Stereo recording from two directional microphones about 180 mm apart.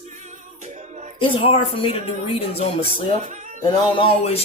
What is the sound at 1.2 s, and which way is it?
Speech, 30° left (ahead or behind).